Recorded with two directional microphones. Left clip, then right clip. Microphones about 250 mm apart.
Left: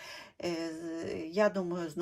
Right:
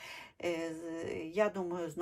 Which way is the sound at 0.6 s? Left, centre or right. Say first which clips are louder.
Left 2 dB; right.